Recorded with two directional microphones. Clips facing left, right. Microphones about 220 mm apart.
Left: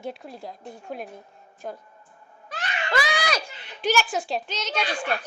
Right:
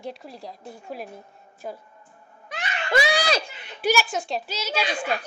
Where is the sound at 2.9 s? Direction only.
30° right (ahead or behind).